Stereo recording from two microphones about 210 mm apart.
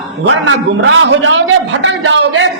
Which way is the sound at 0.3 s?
65° right (ahead or behind).